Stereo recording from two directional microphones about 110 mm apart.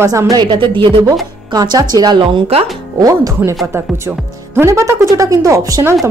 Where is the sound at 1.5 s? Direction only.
35° right (ahead or behind).